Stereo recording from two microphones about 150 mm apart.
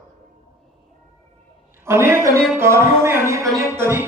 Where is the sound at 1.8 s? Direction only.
15° right (ahead or behind).